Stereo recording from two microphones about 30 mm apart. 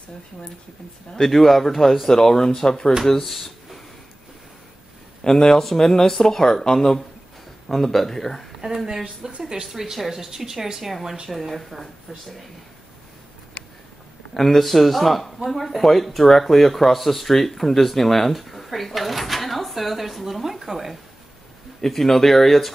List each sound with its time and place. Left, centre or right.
1.1 s speech: centre
3.3 s a sound: centre
5.2 s a man's voice: left
5.5 s speech: centre
7.7 s speech: centre
8.5 s a sound: centre
9.2 s a woman's voice: centre
14.3 s speech: centre
20.4 s speech: centre
21.8 s speech: centre